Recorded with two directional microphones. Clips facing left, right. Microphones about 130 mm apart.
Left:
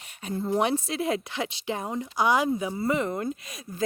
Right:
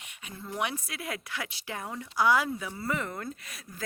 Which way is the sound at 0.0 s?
35° left (ahead or behind).